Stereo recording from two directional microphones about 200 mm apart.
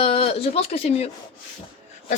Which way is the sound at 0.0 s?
30° left (ahead or behind).